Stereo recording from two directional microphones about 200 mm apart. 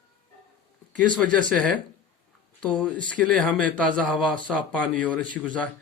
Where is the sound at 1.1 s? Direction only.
5° left (ahead or behind).